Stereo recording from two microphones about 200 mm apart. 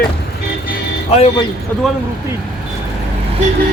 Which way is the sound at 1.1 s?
30° left (ahead or behind).